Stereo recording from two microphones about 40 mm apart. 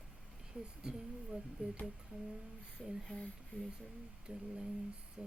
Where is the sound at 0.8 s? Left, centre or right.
Right.